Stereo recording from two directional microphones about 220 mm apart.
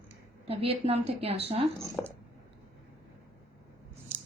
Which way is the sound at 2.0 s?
5° left (ahead or behind).